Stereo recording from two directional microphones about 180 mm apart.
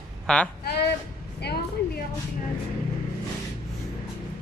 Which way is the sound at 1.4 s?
65° left (ahead or behind).